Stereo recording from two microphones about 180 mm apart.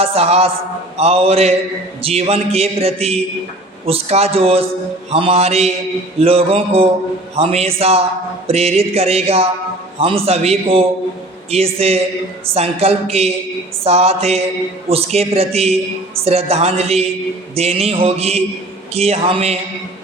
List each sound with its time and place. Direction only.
0.0 s a man's voice: 35° right (ahead or behind)